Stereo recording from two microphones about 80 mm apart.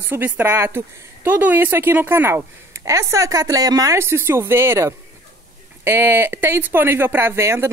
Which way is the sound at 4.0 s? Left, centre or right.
Right.